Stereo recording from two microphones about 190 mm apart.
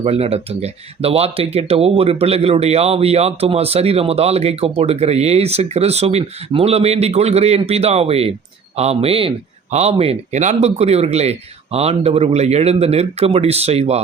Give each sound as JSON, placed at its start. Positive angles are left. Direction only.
{"t": 0.0, "sound": "speech", "side_deg": -35}